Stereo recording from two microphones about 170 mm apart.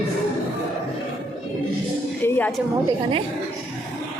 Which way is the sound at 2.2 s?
10° left (ahead or behind).